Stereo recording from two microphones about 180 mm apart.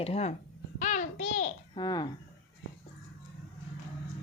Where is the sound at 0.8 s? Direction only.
45° left (ahead or behind).